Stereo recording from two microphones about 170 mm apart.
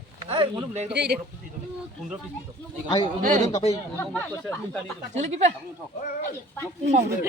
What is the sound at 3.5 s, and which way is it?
Speech, 35° left (ahead or behind).